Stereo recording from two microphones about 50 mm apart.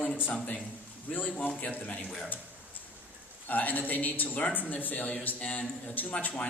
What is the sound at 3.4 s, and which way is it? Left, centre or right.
A man's voice, left.